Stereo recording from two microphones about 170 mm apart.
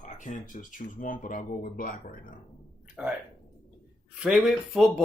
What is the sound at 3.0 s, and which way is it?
Speech, 10° right (ahead or behind).